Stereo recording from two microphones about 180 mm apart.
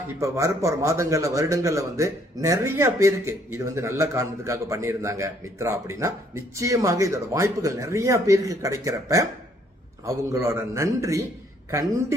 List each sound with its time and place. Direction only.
0.2 s a man's voice: 15° right (ahead or behind)